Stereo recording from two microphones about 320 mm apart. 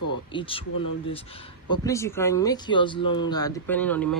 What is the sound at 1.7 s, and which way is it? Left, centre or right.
Speech, centre.